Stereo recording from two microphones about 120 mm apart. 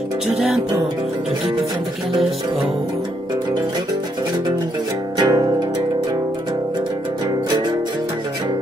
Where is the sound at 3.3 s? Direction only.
35° right (ahead or behind).